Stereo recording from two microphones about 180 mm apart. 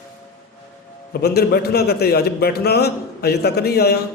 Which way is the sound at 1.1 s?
60° left (ahead or behind).